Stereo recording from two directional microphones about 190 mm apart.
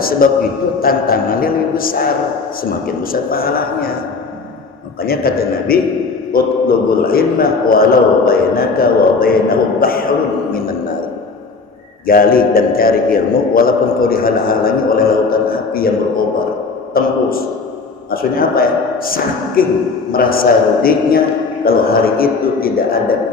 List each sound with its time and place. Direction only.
0.8 s a man's voice: 50° left (ahead or behind)
5.0 s a man's voice: 50° left (ahead or behind)
12.0 s a man's voice: 50° left (ahead or behind)